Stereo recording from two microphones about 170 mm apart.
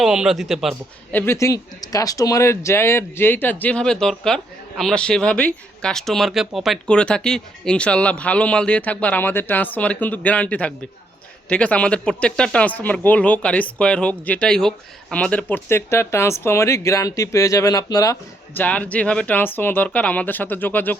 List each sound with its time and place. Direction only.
0.0 s speech: 5° right (ahead or behind)
1.1 s speech: 15° left (ahead or behind)